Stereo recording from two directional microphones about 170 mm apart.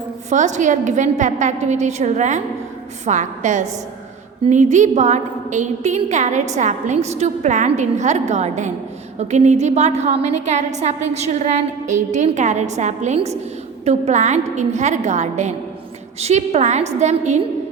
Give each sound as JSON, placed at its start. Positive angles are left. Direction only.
{"t": 0.3, "sound": "a woman's voice", "side_deg": -45}